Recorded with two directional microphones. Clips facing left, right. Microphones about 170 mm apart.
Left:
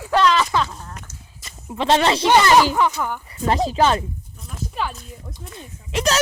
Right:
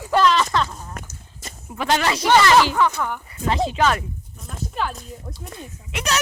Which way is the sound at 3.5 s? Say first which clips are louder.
Left 2 dB; 35° left (ahead or behind).